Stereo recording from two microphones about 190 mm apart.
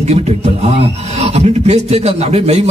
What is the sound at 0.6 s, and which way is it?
A man's voice, 35° right (ahead or behind).